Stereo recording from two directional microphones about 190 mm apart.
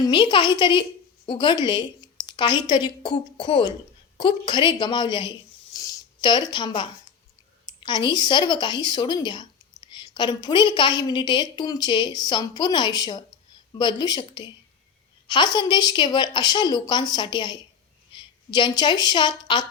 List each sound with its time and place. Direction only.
0.0 s a woman's voice: 25° left (ahead or behind)
5.7 s a sound: 20° left (ahead or behind)
7.7 s a woman's voice: 20° left (ahead or behind)